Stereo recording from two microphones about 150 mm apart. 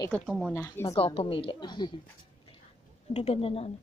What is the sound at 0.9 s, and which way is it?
A woman's voice, 35° left (ahead or behind).